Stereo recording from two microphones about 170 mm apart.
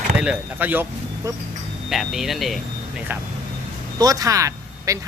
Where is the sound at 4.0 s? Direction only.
20° right (ahead or behind).